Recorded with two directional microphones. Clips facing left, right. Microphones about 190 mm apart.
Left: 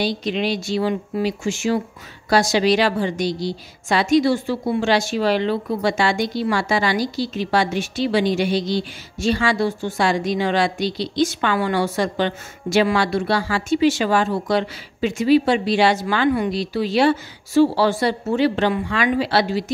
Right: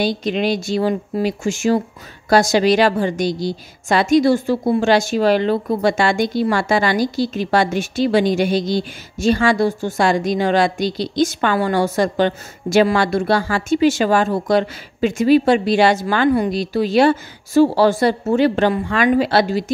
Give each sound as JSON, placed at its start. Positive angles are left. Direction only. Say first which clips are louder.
{"t": 0.0, "sound": "a woman's voice", "louder": "right 3 dB", "side_deg": -50}